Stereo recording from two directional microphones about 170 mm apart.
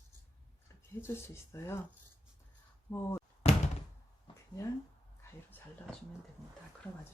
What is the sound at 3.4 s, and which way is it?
Door, 35° left (ahead or behind).